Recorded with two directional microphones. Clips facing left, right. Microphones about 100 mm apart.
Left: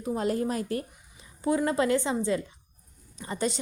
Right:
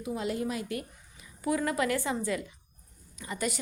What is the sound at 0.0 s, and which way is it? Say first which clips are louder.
A woman's voice: left 4 dB; 40° left (ahead or behind).